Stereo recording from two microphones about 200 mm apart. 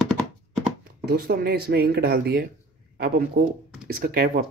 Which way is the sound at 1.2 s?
50° right (ahead or behind).